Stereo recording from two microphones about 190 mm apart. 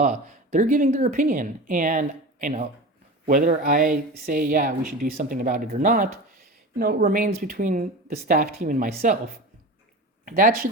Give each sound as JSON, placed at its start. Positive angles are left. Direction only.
{"t": 0.0, "sound": "speech", "side_deg": -40}